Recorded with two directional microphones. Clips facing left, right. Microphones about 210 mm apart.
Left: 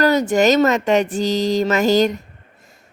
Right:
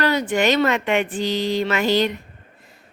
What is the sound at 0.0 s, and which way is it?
Speech, 45° left (ahead or behind).